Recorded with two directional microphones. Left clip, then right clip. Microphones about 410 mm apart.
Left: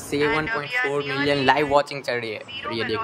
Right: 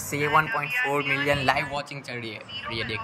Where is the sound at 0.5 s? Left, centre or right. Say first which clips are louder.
Left 2 dB; centre.